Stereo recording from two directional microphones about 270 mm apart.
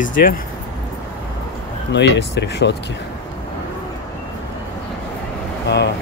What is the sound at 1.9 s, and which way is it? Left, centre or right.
Speech, left.